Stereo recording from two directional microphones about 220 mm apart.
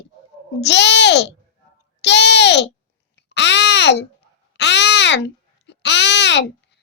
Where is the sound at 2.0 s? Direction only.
50° left (ahead or behind).